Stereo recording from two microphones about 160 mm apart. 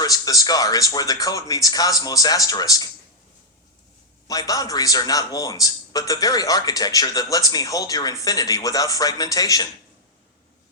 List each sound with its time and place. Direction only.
0.0 s a man's voice: 20° left (ahead or behind)
4.3 s a man's voice: 20° left (ahead or behind)